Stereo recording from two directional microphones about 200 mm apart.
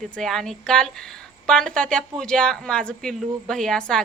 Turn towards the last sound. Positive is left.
turn(degrees=5)  # may be behind; listen again after turning